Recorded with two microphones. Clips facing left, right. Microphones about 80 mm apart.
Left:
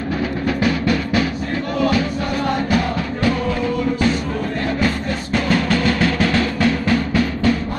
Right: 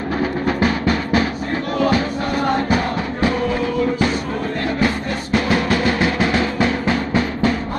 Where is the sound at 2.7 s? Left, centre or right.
Right.